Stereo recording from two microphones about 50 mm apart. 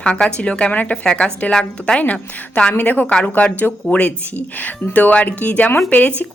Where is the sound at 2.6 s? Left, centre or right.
Left.